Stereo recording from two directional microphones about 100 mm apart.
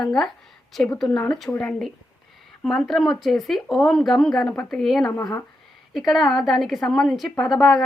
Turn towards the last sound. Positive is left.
turn(degrees=0)  # may be behind; listen again after turning